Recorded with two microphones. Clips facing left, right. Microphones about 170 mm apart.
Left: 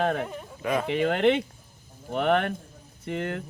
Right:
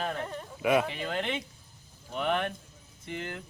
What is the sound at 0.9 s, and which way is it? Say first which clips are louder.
Speech: left 11 dB; 60° left (ahead or behind).